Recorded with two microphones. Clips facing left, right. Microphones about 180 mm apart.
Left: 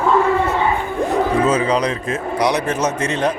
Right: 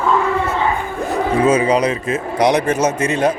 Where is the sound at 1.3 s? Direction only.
10° right (ahead or behind).